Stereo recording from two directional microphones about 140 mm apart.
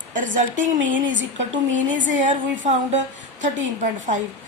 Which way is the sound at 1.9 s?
65° right (ahead or behind).